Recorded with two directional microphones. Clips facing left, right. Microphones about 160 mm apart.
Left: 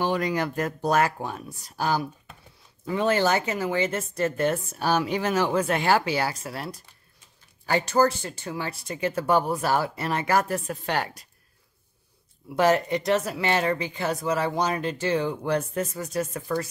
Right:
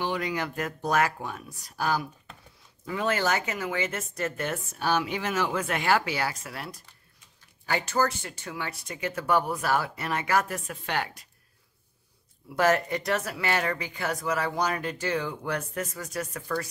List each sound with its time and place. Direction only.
0.0 s speech: 40° left (ahead or behind)
12.5 s speech: 20° left (ahead or behind)